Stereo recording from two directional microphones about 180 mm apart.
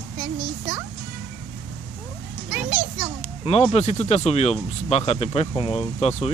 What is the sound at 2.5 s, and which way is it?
Children playing, 5° right (ahead or behind).